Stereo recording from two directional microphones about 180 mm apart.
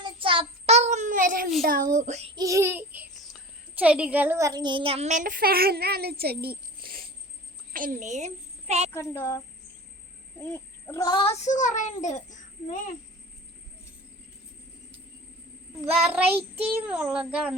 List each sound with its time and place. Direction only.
0.0 s child singing: 30° right (ahead or behind); by 1.5 s 50° right (ahead or behind)
1.6 s speech: 50° right (ahead or behind)
2.3 s a child's voice: 20° right (ahead or behind); by 8.9 s 40° right (ahead or behind)
8.9 s speech: 10° left (ahead or behind)
10.5 s a child's voice: 15° left (ahead or behind); by 12.9 s 45° left (ahead or behind)
15.9 s a child's voice: 10° right (ahead or behind)